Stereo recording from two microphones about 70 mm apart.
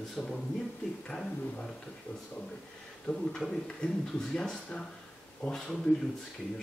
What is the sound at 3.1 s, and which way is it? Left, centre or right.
Speech, centre.